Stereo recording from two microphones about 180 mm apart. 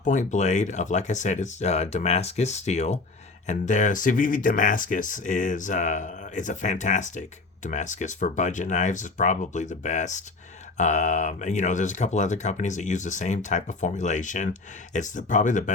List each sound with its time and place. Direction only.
0.0 s speech: 45° left (ahead or behind)